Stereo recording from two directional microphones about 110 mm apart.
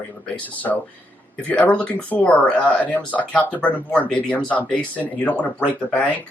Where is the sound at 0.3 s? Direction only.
15° left (ahead or behind).